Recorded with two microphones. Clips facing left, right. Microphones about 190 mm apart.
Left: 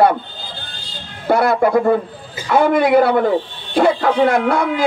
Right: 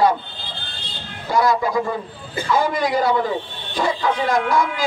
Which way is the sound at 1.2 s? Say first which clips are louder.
Left 4 dB; 60° left (ahead or behind).